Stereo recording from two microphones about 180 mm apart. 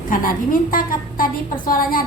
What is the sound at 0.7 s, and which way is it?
A woman's voice, 50° left (ahead or behind).